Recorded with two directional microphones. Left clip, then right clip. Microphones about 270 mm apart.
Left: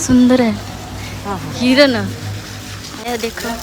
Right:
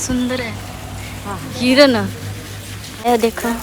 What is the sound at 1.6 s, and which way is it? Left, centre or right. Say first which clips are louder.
Speech: even; centre.